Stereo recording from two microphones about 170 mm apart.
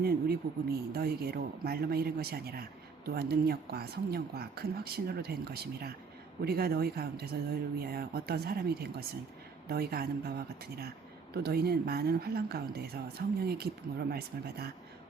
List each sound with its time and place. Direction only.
0.0 s speech: 65° right (ahead or behind)